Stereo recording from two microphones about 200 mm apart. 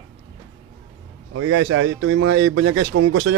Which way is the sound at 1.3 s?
90° right.